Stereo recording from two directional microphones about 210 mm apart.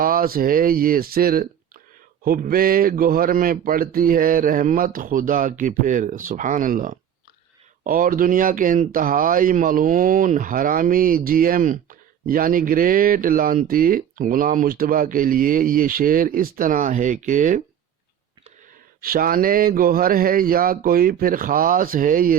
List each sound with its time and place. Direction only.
0.0 s speech: 45° right (ahead or behind)
19.0 s speech: 45° right (ahead or behind)